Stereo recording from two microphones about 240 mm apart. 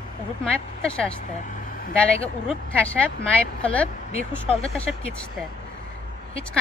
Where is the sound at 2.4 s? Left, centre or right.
Centre.